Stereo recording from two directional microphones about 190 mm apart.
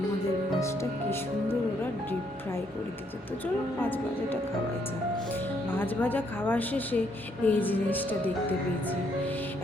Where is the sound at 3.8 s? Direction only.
10° left (ahead or behind).